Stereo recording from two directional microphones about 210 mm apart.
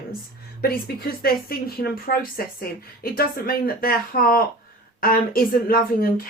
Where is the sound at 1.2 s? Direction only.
45° left (ahead or behind).